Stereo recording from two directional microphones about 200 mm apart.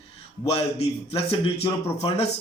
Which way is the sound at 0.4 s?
30° left (ahead or behind).